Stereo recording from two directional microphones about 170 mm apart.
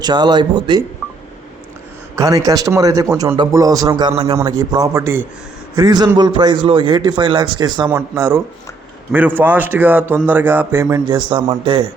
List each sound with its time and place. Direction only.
0.0 s speech: 25° right (ahead or behind)
2.1 s a man's voice: 20° right (ahead or behind)
11.3 s speech: 30° right (ahead or behind)